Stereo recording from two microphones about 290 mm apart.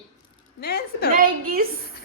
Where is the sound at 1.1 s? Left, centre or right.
Right.